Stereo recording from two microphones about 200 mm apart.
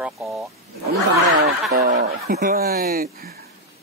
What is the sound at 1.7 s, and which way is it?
Speech, 50° right (ahead or behind).